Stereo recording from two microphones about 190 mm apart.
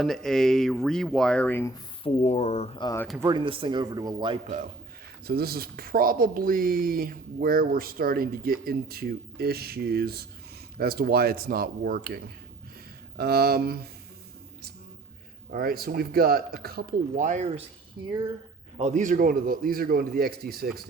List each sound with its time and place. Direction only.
0.0 s speech: centre (ahead or behind)
2.0 s speech: 35° left (ahead or behind)
2.8 s speech: 15° left (ahead or behind)
3.2 s speech: 25° right (ahead or behind)
5.2 s speech: 55° right (ahead or behind)
15.4 s speech: 50° right (ahead or behind); by 17.7 s 35° right (ahead or behind)
18.8 s speech: 40° right (ahead or behind)